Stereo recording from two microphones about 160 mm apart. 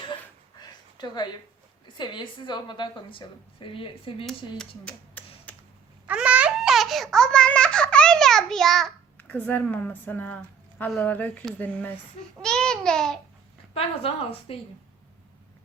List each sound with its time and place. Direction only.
0.9 s a woman's voice: 25° left (ahead or behind)
4.9 s a sound: 10° left (ahead or behind)
6.1 s babbling: 10° right (ahead or behind)
9.1 s a woman's voice: 10° left (ahead or behind)
12.4 s babbling: 5° left (ahead or behind)
13.7 s a woman's voice: 35° left (ahead or behind)